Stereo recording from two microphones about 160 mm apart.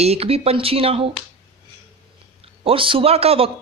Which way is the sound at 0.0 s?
40° right (ahead or behind).